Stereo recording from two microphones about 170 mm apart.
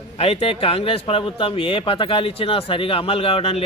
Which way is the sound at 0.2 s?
35° left (ahead or behind).